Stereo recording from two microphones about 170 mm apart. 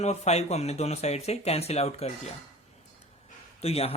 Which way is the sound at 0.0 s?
40° left (ahead or behind).